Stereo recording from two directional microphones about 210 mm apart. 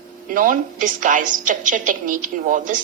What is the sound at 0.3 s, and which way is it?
Speech, 40° right (ahead or behind).